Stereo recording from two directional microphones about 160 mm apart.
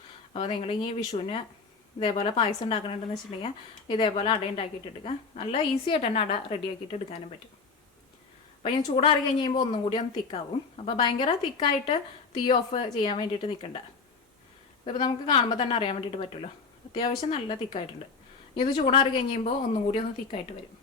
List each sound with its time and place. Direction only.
0.3 s a woman's voice: 35° left (ahead or behind)
8.6 s a woman's voice: 30° left (ahead or behind)
14.8 s a woman's voice: 30° left (ahead or behind)